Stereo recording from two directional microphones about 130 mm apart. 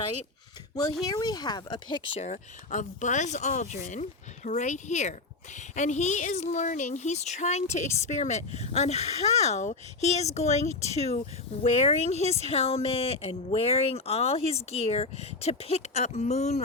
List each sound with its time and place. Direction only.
1.0 s speech: 30° left (ahead or behind)
2.2 s speech: 75° left (ahead or behind); by 16.6 s 60° left (ahead or behind)